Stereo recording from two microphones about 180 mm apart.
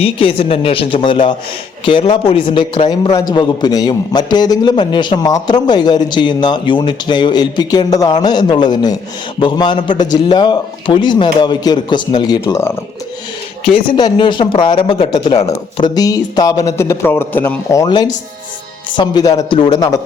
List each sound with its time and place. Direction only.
0.0 s a man's voice: 30° left (ahead or behind)